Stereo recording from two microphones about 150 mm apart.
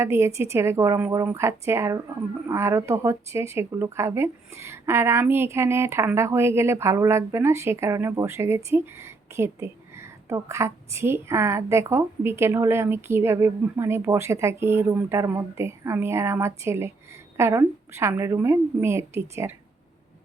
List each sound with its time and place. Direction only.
0.0 s speech: 20° right (ahead or behind)